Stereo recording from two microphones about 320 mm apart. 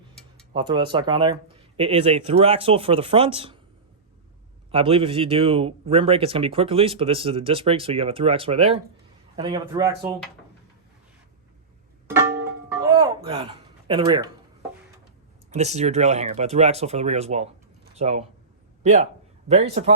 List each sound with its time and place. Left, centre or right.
0.5 s speech: centre
4.7 s speech: centre
12.6 s music: centre
15.4 s speech: right
19.5 s speech: centre